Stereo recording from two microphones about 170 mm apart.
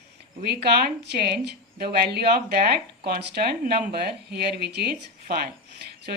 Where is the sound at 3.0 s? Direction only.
75° right (ahead or behind).